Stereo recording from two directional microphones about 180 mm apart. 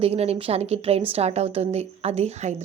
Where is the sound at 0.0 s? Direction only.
35° right (ahead or behind).